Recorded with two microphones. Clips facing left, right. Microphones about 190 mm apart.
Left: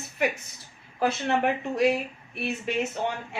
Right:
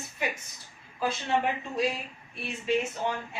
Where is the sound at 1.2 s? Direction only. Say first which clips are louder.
Left 3 dB; 65° left (ahead or behind).